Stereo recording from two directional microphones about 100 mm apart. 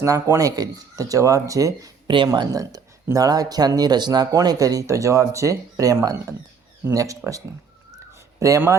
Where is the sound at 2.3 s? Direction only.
40° right (ahead or behind).